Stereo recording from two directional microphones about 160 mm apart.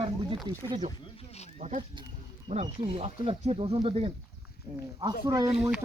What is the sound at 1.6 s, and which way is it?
Speech, 45° right (ahead or behind).